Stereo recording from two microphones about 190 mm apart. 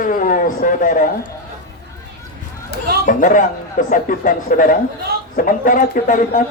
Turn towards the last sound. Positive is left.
turn(degrees=45)  # may be behind; listen again after turning